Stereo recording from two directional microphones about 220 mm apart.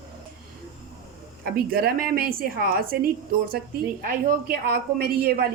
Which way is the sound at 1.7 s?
40° right (ahead or behind).